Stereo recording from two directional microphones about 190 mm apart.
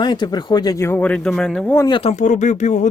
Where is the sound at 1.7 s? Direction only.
25° left (ahead or behind); by 2.9 s 40° left (ahead or behind).